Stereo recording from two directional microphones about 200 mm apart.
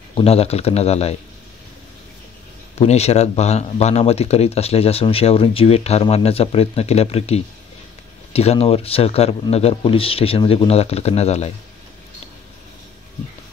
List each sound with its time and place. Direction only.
0.1 s speech: 30° left (ahead or behind)
2.8 s speech: 30° left (ahead or behind)